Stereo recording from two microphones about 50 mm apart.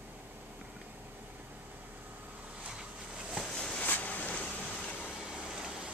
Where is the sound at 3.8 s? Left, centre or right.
Left.